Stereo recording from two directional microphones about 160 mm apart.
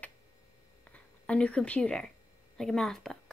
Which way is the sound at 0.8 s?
10° left (ahead or behind).